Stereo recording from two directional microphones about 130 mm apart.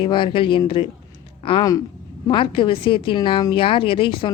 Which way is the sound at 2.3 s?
40° left (ahead or behind).